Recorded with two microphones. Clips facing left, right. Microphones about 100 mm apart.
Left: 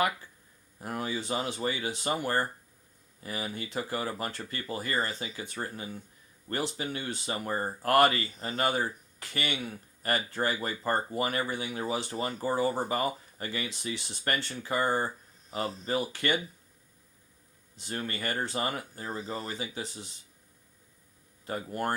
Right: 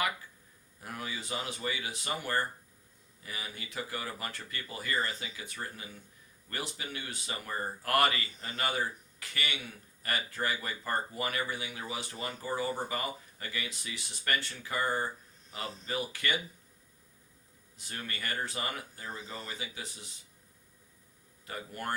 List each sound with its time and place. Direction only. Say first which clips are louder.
0.8 s speech: left 7 dB; 30° left (ahead or behind)
17.7 s speech: left 6 dB; 30° left (ahead or behind)
21.4 s speech: left 6 dB; 30° left (ahead or behind)